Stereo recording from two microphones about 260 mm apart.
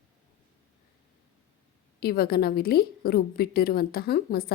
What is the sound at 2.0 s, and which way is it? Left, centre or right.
A woman's voice, left.